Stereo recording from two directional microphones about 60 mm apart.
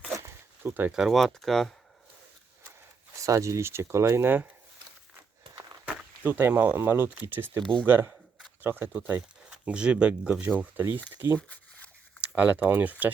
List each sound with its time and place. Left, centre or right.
0.6 s speech: right
1.0 s speech: centre
3.2 s speech: right
6.2 s speech: right
6.7 s speech: right
9.6 s speech: centre
10.6 s speech: right
11.3 s speech: left
12.2 s speech: right